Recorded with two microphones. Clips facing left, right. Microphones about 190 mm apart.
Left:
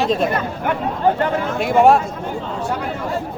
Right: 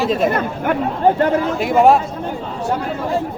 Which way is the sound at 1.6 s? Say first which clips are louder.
Left 1 dB; centre (ahead or behind).